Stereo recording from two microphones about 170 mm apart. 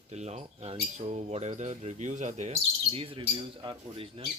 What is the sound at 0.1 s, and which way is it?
Speech, 40° right (ahead or behind).